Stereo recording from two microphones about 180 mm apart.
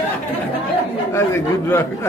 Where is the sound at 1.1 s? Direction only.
15° left (ahead or behind).